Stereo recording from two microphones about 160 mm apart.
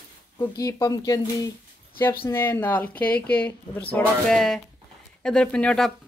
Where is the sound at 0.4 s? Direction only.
20° left (ahead or behind); by 5.9 s 5° left (ahead or behind).